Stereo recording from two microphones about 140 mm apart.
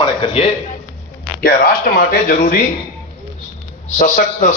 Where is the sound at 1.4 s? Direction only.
90° left.